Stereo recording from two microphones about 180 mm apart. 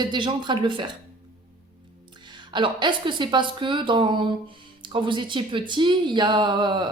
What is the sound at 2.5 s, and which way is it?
Speech, 25° right (ahead or behind).